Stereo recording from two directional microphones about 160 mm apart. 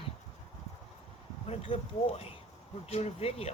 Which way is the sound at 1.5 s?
35° left (ahead or behind).